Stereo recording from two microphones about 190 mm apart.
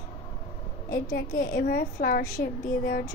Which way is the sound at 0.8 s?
55° left (ahead or behind).